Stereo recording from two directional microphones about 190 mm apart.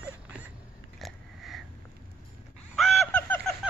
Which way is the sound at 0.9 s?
Centre (ahead or behind).